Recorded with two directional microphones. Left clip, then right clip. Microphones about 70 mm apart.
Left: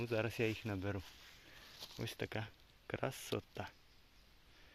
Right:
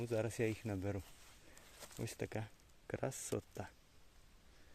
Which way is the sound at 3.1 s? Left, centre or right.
Right.